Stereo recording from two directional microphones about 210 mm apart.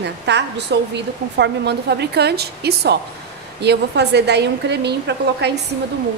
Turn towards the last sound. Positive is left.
turn(degrees=-55)  # may be behind; listen again after turning